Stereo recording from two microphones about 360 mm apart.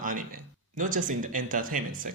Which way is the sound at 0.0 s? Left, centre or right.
Right.